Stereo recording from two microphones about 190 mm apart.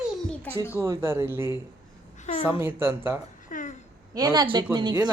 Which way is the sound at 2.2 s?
40° left (ahead or behind).